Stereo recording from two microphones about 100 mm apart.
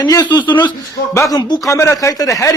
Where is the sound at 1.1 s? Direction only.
35° left (ahead or behind).